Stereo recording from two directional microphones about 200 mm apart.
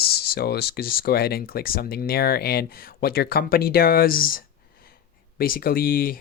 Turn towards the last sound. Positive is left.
turn(degrees=45)  # may be behind; listen again after turning